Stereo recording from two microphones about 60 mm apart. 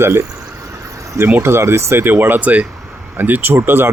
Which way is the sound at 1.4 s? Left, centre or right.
Right.